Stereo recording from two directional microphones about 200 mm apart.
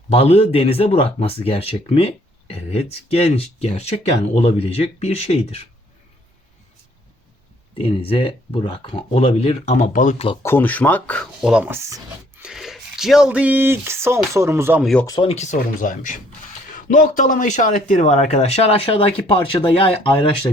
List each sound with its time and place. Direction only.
0.1 s speech: 30° left (ahead or behind)
7.8 s speech: 30° left (ahead or behind)
10.4 s speech: 10° left (ahead or behind); by 12.0 s 15° right (ahead or behind)
12.4 s speech: centre (ahead or behind)
15.0 s speech: 25° left (ahead or behind)